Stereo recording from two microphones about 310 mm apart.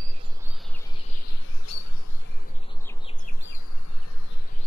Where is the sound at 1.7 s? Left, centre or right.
Left.